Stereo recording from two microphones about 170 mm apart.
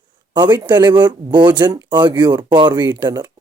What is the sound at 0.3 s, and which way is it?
Speech, 25° right (ahead or behind).